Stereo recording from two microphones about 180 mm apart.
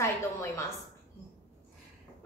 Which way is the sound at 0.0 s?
15° left (ahead or behind).